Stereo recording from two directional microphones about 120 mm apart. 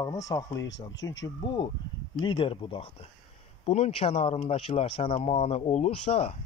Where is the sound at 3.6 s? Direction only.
60° left (ahead or behind).